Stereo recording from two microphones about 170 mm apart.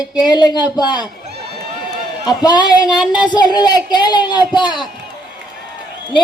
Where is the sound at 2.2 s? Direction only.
25° left (ahead or behind).